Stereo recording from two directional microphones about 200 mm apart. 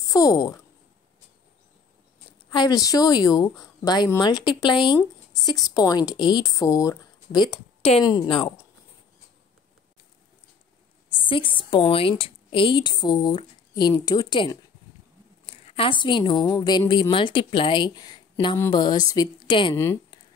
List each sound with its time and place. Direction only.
0.1 s speech: 20° left (ahead or behind)
2.5 s speech: 20° left (ahead or behind)
11.1 s a woman's voice: 25° left (ahead or behind)
19.7 s speech: 10° left (ahead or behind)